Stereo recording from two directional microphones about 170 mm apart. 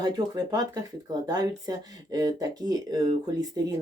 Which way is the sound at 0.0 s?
25° right (ahead or behind).